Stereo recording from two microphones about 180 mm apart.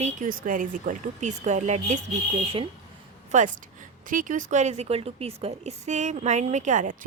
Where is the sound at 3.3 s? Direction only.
40° right (ahead or behind).